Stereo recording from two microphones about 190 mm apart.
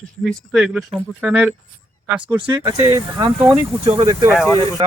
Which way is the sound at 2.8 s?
20° right (ahead or behind).